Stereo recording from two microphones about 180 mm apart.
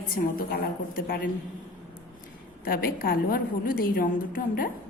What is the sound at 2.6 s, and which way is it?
A woman's voice, 55° left (ahead or behind).